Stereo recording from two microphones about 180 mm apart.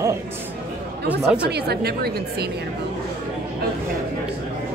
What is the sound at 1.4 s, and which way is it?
A woman's voice, 65° right (ahead or behind).